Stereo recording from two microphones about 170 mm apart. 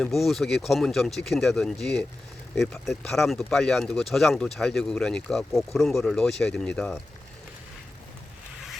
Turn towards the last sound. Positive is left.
turn(degrees=5)  # may be behind; listen again after turning